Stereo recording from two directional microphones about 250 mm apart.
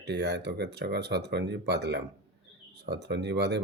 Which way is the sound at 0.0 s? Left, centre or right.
Right.